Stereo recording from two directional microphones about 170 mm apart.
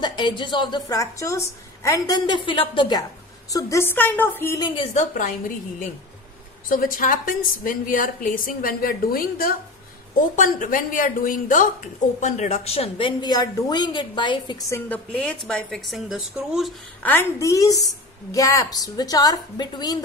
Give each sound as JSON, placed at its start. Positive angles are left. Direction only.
{"t": 0.0, "sound": "a woman's voice", "side_deg": 25}
{"t": 4.6, "sound": "a woman's voice", "side_deg": 30}
{"t": 4.9, "sound": "a woman's voice", "side_deg": 50}
{"t": 14.7, "sound": "a woman's voice", "side_deg": 10}
{"t": 17.0, "sound": "a woman's voice", "side_deg": 10}